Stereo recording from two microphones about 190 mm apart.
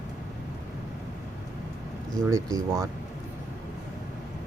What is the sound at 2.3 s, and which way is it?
Speech, 15° right (ahead or behind).